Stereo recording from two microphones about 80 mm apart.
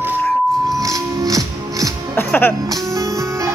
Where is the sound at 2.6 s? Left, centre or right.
Right.